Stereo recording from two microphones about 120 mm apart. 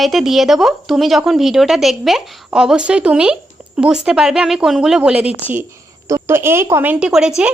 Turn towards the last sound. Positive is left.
turn(degrees=-5)  # may be behind; listen again after turning